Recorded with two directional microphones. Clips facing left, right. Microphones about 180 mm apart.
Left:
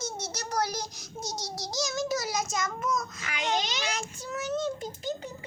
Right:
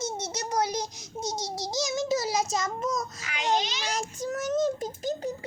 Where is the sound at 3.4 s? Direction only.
40° right (ahead or behind).